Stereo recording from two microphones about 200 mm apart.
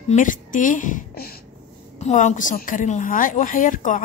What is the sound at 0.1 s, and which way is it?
A woman's voice, 40° left (ahead or behind).